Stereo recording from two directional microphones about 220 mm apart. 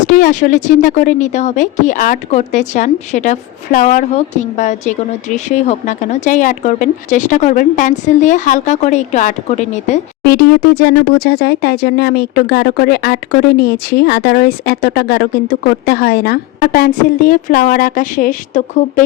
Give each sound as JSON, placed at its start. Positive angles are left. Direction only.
{"t": 0.1, "sound": "speech", "side_deg": 35}
{"t": 10.2, "sound": "speech", "side_deg": 45}